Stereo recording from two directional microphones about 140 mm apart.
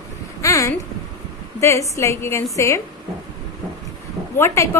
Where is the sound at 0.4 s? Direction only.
20° left (ahead or behind).